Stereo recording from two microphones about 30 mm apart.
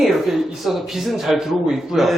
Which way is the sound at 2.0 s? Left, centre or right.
Centre.